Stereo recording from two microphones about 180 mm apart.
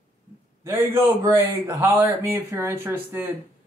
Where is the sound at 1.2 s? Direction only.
15° right (ahead or behind).